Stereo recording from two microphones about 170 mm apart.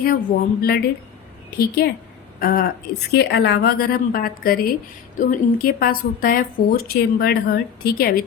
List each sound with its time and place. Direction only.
0.0 s a woman's voice: 60° left (ahead or behind)
3.1 s a woman's voice: 85° left; by 8.2 s 65° left (ahead or behind)